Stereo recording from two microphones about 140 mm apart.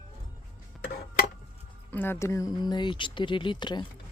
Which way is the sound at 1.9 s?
15° left (ahead or behind).